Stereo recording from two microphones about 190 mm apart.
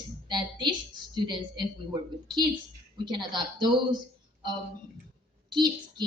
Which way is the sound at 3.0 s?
25° right (ahead or behind).